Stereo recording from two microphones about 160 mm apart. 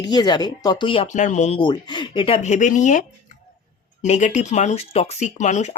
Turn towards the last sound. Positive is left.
turn(degrees=45)  # may be behind; listen again after turning